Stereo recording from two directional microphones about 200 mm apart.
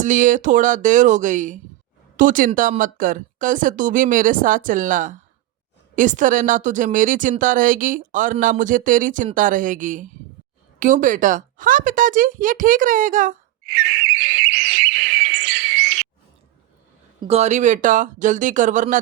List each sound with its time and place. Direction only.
0.0 s speech: 40° right (ahead or behind)
13.7 s bird: 60° right (ahead or behind)
17.2 s speech: 30° right (ahead or behind)